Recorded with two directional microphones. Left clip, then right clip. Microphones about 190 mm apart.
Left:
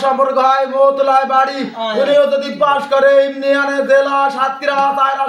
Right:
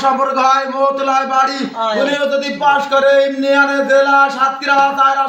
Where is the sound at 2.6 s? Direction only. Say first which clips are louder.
Even; 10° left (ahead or behind).